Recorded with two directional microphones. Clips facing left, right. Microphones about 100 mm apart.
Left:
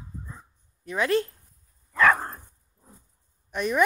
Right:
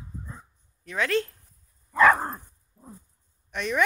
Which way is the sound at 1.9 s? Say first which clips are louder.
Right 2 dB; 20° right (ahead or behind).